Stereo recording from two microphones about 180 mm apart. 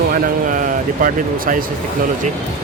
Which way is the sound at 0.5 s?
50° right (ahead or behind).